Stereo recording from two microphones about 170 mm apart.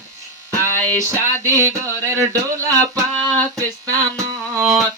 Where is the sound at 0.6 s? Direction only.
15° right (ahead or behind).